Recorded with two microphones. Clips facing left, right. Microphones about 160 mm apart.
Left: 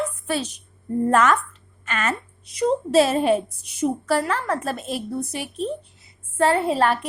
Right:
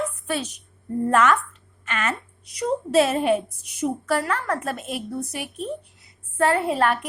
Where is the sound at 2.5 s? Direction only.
25° left (ahead or behind).